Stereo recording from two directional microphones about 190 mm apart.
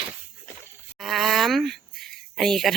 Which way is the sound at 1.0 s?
Centre (ahead or behind).